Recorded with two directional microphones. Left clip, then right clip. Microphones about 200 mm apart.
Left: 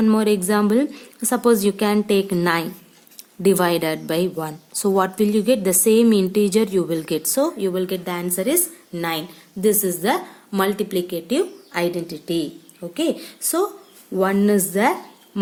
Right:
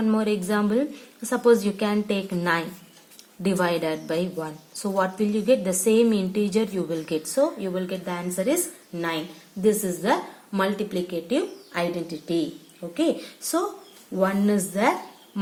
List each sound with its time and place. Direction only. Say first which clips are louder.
0.0 s a woman's voice: left 6 dB; 55° left (ahead or behind)